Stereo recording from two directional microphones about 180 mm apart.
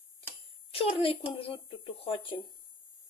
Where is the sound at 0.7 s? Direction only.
30° left (ahead or behind).